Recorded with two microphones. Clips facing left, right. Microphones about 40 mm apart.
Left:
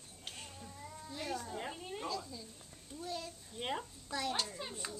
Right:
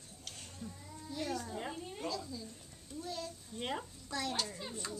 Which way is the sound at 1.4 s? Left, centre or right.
Centre.